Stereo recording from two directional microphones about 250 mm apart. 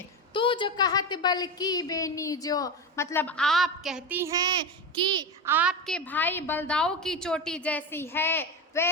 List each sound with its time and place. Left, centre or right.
0.3 s a woman's voice: centre
5.5 s a woman's voice: centre